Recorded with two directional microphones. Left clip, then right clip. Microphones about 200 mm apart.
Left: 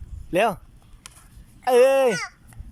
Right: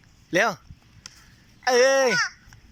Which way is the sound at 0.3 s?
10° left (ahead or behind).